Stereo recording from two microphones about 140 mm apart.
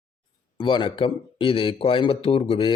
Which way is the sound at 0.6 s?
35° left (ahead or behind).